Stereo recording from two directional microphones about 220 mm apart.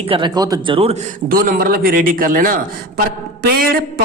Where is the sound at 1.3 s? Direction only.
40° right (ahead or behind).